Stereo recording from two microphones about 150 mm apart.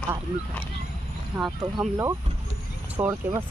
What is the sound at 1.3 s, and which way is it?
Speech, 20° right (ahead or behind).